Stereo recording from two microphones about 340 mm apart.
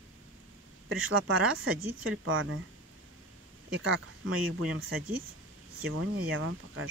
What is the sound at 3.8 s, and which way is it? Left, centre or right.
Speech, right.